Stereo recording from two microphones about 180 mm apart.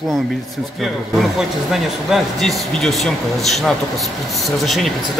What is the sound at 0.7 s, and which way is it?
Speech, centre (ahead or behind).